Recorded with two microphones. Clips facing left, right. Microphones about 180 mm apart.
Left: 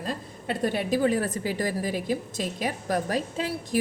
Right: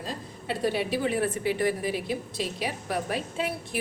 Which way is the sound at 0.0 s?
50° left (ahead or behind).